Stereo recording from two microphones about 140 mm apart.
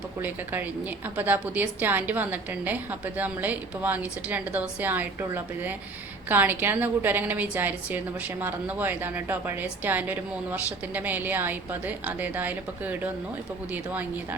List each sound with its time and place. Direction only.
0.2 s a woman's voice: 15° right (ahead or behind)